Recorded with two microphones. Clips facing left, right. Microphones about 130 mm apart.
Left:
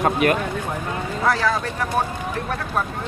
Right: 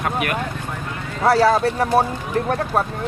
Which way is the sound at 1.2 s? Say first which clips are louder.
Right 7 dB; 35° right (ahead or behind).